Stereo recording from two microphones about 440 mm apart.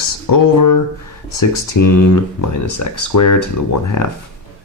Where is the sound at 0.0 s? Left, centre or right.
Left.